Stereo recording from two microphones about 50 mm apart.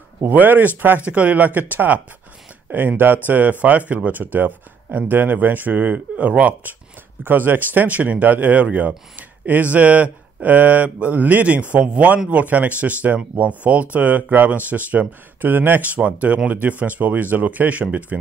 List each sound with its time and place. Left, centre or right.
0.3 s speech: right
7.2 s speech: right